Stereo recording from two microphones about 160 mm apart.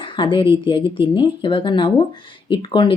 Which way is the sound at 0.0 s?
30° left (ahead or behind).